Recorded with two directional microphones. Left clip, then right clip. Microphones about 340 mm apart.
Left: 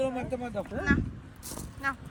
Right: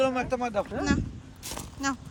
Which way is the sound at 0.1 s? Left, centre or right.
Centre.